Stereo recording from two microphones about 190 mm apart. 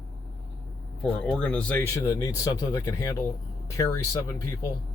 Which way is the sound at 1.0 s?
5° left (ahead or behind).